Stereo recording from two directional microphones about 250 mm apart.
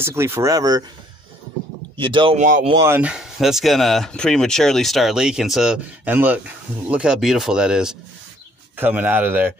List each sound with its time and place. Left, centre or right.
0.0 s speech: centre
2.0 s speech: centre
2.4 s speech: right
2.7 s speech: centre